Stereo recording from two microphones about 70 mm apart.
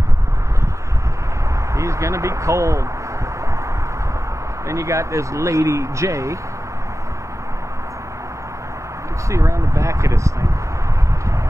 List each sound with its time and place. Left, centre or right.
1.8 s speech: right
4.6 s speech: right
9.3 s speech: right